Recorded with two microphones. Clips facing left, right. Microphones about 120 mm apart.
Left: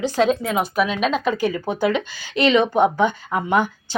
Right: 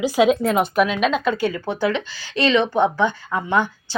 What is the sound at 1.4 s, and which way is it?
Speech, 15° left (ahead or behind).